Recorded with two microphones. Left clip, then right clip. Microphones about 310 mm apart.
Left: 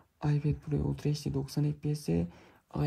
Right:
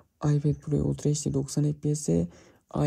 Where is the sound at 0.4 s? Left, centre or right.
Left.